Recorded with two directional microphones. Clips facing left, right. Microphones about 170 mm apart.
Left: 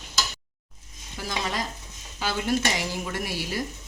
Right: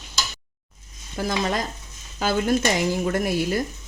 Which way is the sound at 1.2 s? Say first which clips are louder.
Right 6 dB; 50° right (ahead or behind).